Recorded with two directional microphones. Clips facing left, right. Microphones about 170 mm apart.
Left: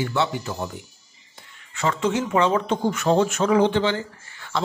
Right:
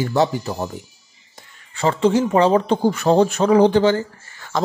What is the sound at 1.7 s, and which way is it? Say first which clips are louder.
A man's voice: right 6 dB; 30° right (ahead or behind).